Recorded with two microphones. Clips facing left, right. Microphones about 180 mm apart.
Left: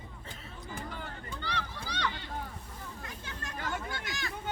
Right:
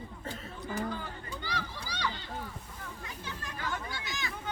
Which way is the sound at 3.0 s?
50° left (ahead or behind).